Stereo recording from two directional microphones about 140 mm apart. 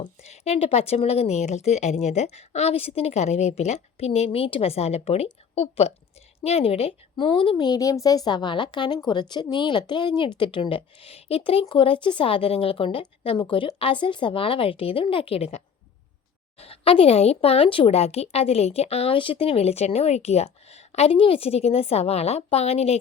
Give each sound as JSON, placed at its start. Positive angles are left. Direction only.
{"t": 0.2, "sound": "a woman's voice", "side_deg": 50}